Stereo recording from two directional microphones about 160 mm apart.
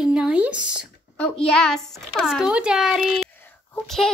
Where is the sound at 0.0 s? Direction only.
5° right (ahead or behind).